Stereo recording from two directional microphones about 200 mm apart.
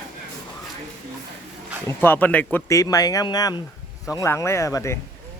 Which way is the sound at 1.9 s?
10° left (ahead or behind).